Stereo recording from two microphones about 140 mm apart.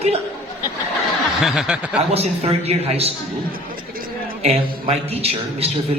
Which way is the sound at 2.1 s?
50° right (ahead or behind).